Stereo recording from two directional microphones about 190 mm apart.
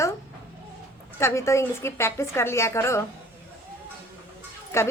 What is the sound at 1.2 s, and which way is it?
Speech, 15° left (ahead or behind).